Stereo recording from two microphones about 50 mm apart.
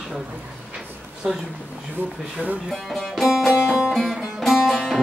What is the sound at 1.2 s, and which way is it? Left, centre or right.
Speech, centre.